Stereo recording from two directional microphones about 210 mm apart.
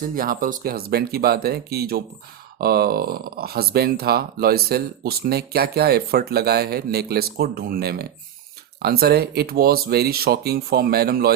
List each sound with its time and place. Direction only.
0.2 s speech: 40° right (ahead or behind)